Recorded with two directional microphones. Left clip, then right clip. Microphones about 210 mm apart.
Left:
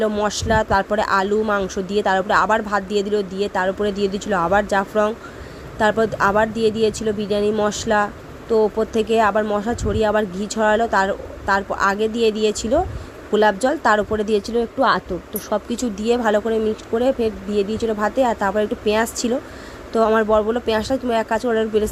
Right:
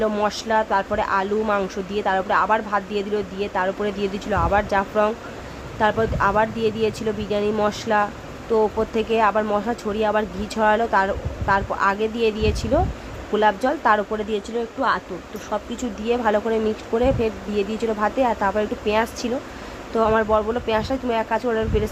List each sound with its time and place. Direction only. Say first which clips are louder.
0.0 s speech: left 1 dB; 15° left (ahead or behind); by 15.0 s 35° left (ahead or behind)
15.4 s speech: left 4 dB; 25° left (ahead or behind)